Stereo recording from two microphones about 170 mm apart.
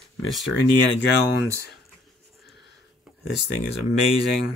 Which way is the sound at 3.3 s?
90° left.